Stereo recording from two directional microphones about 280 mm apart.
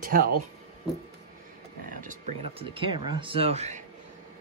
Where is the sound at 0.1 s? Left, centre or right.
Right.